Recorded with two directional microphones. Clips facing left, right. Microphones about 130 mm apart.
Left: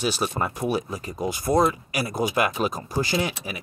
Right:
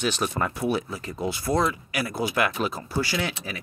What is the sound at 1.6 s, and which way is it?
Speech, 45° left (ahead or behind).